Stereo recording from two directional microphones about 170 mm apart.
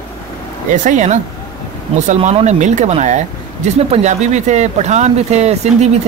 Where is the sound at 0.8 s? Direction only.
45° right (ahead or behind).